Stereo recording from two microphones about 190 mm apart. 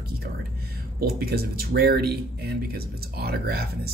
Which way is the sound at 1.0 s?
55° right (ahead or behind).